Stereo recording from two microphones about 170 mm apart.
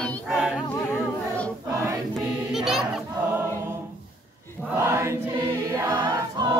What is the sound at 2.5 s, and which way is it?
Choir, centre (ahead or behind).